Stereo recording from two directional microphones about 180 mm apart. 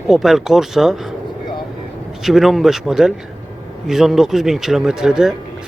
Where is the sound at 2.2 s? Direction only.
Centre (ahead or behind).